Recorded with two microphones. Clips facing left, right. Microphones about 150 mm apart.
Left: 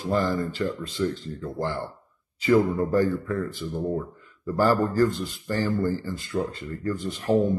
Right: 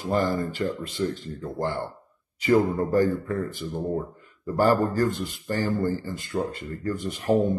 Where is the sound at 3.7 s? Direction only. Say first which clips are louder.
Even; 20° right (ahead or behind).